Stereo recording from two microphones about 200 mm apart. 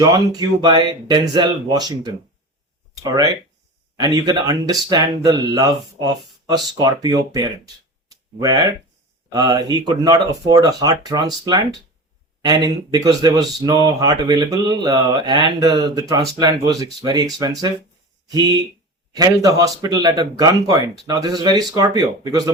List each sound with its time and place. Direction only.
0.0 s speech: 20° right (ahead or behind)